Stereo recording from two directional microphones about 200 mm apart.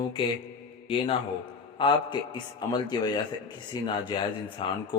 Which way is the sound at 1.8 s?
25° left (ahead or behind).